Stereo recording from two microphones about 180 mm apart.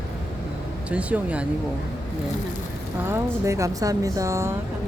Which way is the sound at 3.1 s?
15° right (ahead or behind).